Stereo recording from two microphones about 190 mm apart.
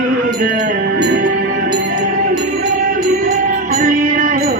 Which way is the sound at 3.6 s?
45° right (ahead or behind).